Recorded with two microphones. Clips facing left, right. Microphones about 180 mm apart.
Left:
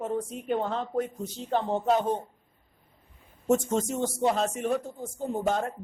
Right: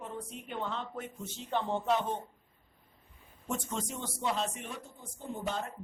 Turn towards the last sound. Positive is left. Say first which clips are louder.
# left 9 dB
turn(degrees=45)  # may be behind; listen again after turning